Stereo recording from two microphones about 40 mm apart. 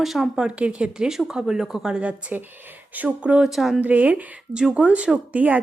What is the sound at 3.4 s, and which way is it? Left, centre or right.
Speech, centre.